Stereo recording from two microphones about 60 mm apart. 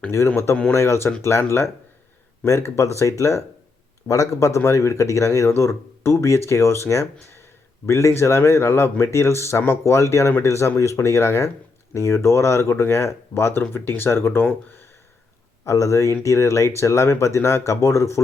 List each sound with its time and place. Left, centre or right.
0.3 s speech: left
15.6 s speech: left